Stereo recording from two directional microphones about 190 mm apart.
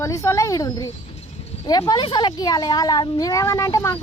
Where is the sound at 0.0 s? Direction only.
15° left (ahead or behind).